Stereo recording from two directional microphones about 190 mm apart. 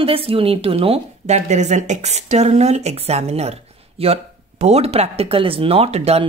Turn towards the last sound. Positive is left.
turn(degrees=-35)  # may be behind; listen again after turning